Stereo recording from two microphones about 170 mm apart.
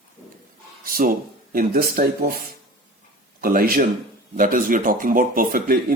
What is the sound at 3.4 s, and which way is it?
Speech, 60° right (ahead or behind).